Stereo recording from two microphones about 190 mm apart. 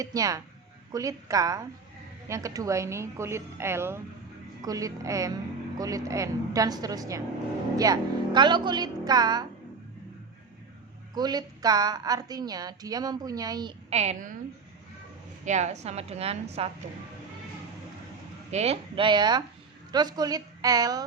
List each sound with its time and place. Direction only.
0.0 s a woman's voice: 20° right (ahead or behind)
11.1 s a woman's voice: 20° right (ahead or behind)
13.9 s a woman's voice: 35° right (ahead or behind)
15.4 s a woman's voice: 35° right (ahead or behind)
18.5 s a woman's voice: 35° right (ahead or behind)